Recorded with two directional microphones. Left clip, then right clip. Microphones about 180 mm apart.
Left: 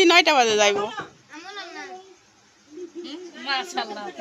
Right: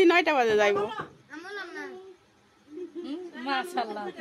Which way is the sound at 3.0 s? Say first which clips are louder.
Left 4 dB; 55° right (ahead or behind).